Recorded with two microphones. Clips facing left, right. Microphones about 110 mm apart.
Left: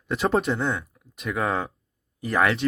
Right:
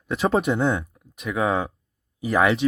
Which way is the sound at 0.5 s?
15° right (ahead or behind).